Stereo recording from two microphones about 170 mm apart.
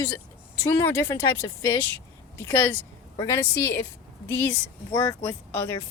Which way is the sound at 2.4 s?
15° left (ahead or behind).